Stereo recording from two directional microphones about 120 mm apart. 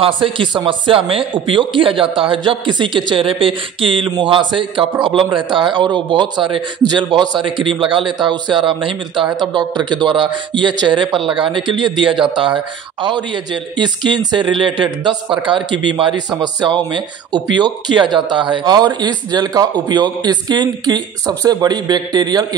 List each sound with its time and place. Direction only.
0.0 s speech: 45° right (ahead or behind)